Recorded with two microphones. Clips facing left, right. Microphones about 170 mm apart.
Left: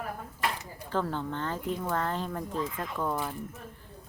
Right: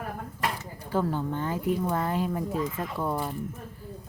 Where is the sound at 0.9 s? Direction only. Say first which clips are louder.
Right 3 dB; 10° right (ahead or behind).